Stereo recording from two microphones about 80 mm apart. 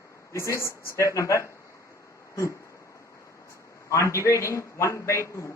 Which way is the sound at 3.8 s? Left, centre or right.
Left.